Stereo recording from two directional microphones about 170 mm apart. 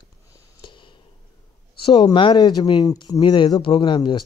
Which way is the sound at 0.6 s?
30° left (ahead or behind).